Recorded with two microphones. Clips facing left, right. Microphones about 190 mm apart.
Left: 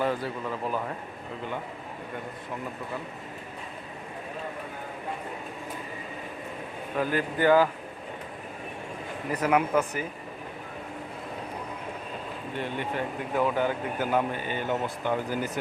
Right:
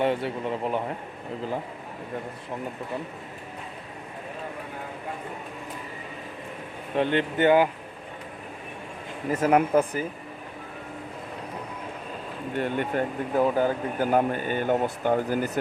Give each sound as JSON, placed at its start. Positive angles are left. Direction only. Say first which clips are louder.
{"t": 0.0, "sound": "speech", "louder": "right 3 dB", "side_deg": -25}
{"t": 6.9, "sound": "speech", "louder": "right 4 dB", "side_deg": -25}
{"t": 9.5, "sound": "speech", "louder": "right 3 dB", "side_deg": -35}
{"t": 12.5, "sound": "speech", "louder": "right 5 dB", "side_deg": -50}
{"t": 13.4, "sound": "speech", "louder": "right 3 dB", "side_deg": -40}